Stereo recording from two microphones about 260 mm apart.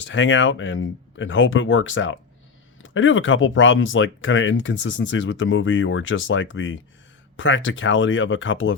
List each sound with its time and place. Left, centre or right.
0.0 s speech: left